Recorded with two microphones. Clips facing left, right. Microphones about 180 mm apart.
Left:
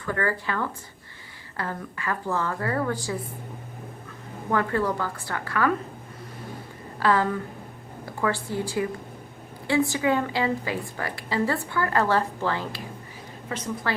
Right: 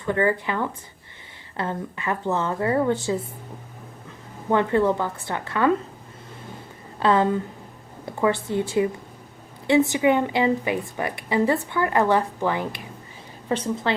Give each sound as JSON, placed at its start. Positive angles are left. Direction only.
{"t": 0.0, "sound": "a woman's voice", "side_deg": -20}
{"t": 4.5, "sound": "a woman's voice", "side_deg": -25}
{"t": 7.0, "sound": "a woman's voice", "side_deg": -20}
{"t": 13.5, "sound": "a woman's voice", "side_deg": -30}